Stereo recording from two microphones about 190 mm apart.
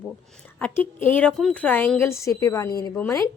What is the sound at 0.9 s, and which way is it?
A woman's voice, 10° left (ahead or behind).